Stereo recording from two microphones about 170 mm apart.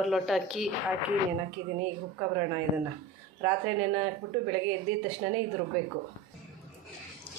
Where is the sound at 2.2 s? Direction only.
25° right (ahead or behind).